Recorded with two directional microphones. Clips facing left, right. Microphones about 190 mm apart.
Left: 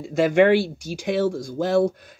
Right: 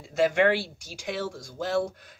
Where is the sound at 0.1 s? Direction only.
20° left (ahead or behind).